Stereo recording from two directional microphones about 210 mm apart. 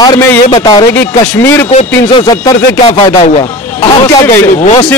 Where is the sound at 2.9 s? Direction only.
30° left (ahead or behind).